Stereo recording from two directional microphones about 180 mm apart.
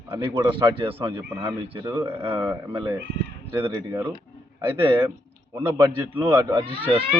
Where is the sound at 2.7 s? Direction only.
30° right (ahead or behind).